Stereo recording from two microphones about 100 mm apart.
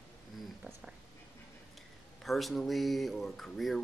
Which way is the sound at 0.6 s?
5° right (ahead or behind).